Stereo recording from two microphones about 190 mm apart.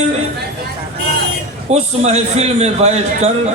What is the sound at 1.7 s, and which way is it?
A man's voice, 35° right (ahead or behind).